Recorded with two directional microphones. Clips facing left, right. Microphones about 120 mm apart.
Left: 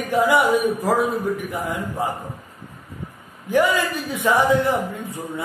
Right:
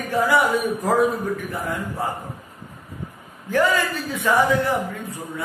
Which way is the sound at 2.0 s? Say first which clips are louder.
Left 2 dB; 20° left (ahead or behind).